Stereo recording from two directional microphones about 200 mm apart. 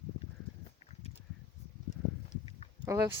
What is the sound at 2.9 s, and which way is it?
Speech, 15° right (ahead or behind).